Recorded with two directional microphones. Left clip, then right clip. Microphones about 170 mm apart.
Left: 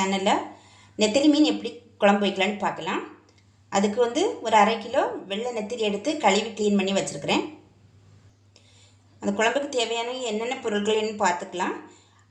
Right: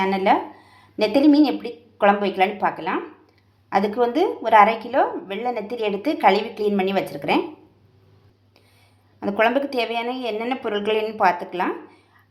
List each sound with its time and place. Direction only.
0.0 s a woman's voice: 30° right (ahead or behind)
9.2 s a woman's voice: 30° right (ahead or behind)